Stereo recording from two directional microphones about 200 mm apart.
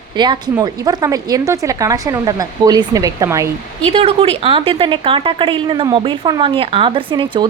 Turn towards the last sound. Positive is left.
turn(degrees=-25)  # may be behind; listen again after turning